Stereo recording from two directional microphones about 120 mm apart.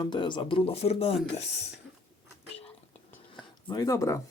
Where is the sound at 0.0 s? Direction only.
40° left (ahead or behind); by 1.6 s 65° left (ahead or behind).